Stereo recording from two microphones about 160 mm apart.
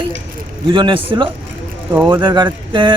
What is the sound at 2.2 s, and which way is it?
Speech, 30° right (ahead or behind).